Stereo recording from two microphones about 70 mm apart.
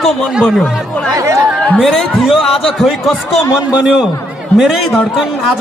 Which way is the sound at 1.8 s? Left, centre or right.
Centre.